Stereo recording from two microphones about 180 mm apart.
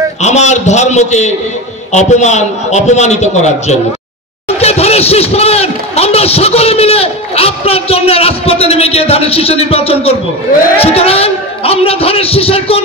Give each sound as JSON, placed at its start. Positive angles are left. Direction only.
{"t": 0.2, "sound": "speech", "side_deg": 40}